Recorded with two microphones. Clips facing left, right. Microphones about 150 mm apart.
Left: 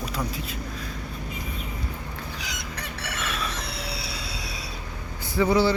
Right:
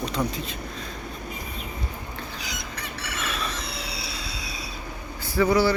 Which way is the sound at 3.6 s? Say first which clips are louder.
Left 1 dB; 60° left (ahead or behind).